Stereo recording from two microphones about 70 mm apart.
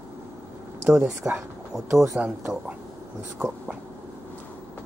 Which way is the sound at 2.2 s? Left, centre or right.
Centre.